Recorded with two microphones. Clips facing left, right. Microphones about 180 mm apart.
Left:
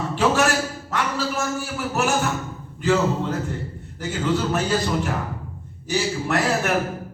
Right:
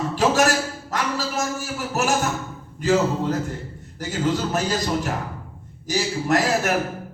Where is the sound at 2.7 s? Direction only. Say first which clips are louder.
Even; 40° right (ahead or behind).